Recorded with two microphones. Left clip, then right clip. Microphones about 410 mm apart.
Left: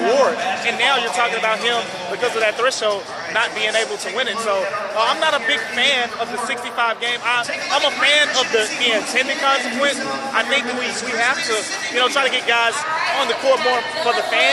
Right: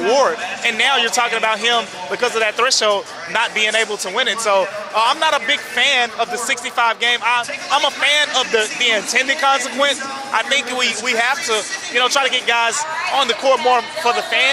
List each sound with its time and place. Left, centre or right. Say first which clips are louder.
0.1 s a man's voice: right 2 dB; right
11.2 s speech: left 2 dB; right